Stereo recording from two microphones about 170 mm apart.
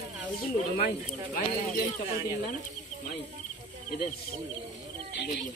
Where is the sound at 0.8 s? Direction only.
55° left (ahead or behind).